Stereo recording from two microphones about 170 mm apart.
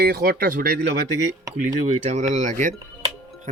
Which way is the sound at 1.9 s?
45° right (ahead or behind).